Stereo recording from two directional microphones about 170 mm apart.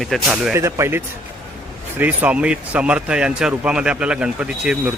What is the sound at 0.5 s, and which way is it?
Speech, 15° right (ahead or behind).